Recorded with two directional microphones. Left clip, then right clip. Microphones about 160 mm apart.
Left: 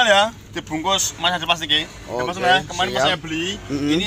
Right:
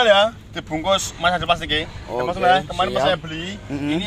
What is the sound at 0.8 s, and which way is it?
Speech, 90° right.